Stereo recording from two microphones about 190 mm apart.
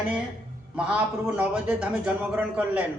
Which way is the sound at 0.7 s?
5° right (ahead or behind).